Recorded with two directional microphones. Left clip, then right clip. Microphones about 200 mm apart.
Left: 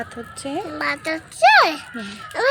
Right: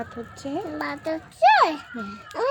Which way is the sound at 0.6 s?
20° right (ahead or behind).